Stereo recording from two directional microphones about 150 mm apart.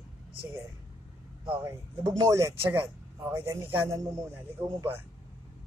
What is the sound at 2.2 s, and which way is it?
A man's voice, 20° right (ahead or behind).